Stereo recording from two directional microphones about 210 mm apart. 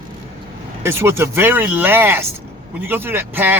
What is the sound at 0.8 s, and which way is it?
Speech, 10° right (ahead or behind).